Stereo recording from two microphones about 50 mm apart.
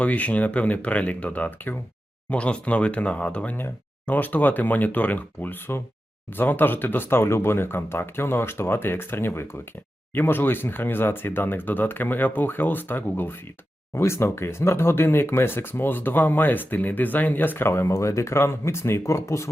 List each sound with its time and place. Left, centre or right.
0.0 s speech: left
2.3 s speech: left
13.9 s speech: left
17.7 s speech: left